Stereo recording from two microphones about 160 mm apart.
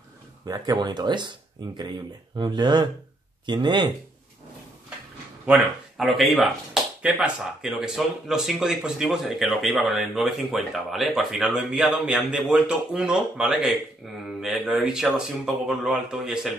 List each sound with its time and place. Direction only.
0.5 s speech: 25° right (ahead or behind)
5.5 s speech: centre (ahead or behind)